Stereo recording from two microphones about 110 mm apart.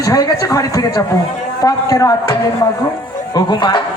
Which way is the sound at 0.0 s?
30° left (ahead or behind).